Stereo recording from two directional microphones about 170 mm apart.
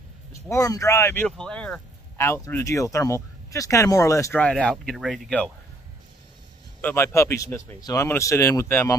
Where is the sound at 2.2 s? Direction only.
15° left (ahead or behind).